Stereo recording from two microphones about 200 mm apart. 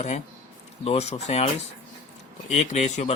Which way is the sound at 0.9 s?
30° left (ahead or behind).